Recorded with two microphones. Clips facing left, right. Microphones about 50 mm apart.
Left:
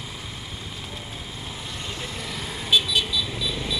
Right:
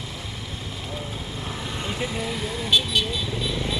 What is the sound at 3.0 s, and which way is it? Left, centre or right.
Vehicle, right.